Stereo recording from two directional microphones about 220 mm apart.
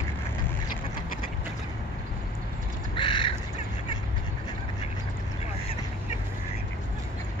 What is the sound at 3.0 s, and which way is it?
Bird, 20° left (ahead or behind).